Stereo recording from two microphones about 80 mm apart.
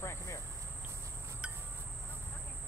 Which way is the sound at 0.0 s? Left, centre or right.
Left.